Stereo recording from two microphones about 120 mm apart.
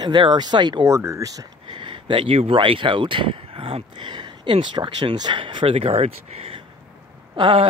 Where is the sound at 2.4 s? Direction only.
50° right (ahead or behind).